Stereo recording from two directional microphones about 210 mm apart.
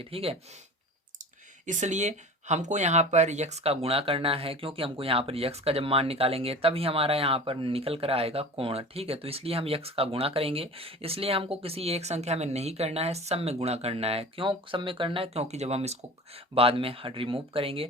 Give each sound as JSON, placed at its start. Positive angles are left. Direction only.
{"t": 0.0, "sound": "speech", "side_deg": -25}
{"t": 1.6, "sound": "speech", "side_deg": -35}